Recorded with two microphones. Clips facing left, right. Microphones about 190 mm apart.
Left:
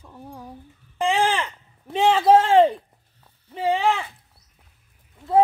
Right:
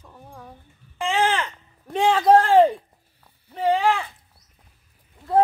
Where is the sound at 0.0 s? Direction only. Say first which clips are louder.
Left 4 dB; 10° left (ahead or behind).